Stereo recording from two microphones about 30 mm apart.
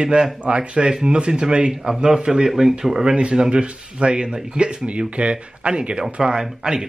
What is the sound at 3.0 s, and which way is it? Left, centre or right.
Speech, right.